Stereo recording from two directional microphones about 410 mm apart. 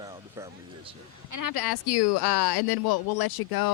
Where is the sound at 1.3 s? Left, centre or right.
Left.